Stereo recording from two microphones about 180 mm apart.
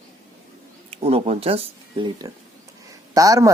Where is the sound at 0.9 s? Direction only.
35° right (ahead or behind); by 3.5 s 20° right (ahead or behind).